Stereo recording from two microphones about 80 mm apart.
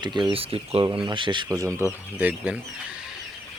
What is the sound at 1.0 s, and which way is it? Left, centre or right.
Speech, right.